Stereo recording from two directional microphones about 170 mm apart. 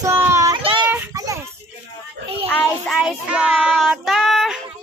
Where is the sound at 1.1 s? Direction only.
20° right (ahead or behind).